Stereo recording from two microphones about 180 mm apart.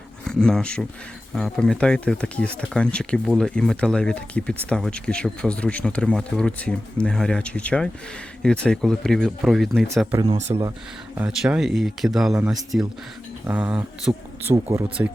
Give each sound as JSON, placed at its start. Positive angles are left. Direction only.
{"t": 0.3, "sound": "speech", "side_deg": 5}
{"t": 10.5, "sound": "speech", "side_deg": -25}
{"t": 11.1, "sound": "speech", "side_deg": -5}